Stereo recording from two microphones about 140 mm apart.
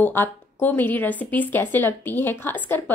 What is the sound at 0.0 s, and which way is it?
Speech, 15° left (ahead or behind).